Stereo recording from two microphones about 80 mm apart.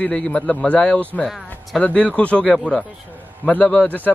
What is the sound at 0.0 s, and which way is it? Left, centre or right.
Speech, centre.